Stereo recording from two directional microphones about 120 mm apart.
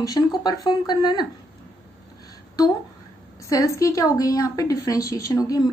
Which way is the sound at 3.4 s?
25° left (ahead or behind).